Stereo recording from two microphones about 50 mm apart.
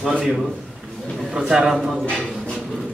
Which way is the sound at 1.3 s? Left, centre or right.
Centre.